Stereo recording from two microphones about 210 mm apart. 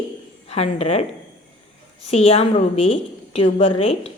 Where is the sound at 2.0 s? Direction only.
30° left (ahead or behind).